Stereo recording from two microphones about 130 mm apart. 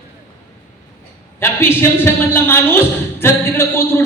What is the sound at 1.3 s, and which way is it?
A man's voice, 20° left (ahead or behind).